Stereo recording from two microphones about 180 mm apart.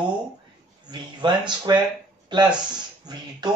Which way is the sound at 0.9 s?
25° right (ahead or behind).